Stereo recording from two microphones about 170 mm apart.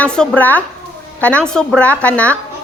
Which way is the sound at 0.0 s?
5° left (ahead or behind).